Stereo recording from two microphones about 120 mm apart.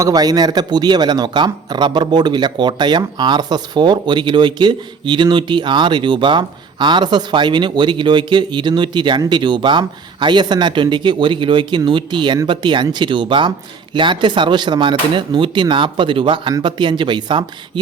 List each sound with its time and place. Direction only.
0.0 s speech: 30° right (ahead or behind)